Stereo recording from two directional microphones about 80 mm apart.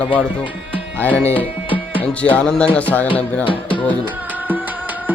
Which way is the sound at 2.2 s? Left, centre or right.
Centre.